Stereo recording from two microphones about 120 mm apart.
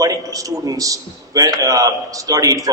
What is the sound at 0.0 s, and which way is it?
A man's voice, 30° right (ahead or behind).